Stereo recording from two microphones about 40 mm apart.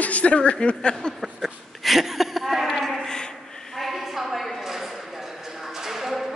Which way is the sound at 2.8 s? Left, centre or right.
Centre.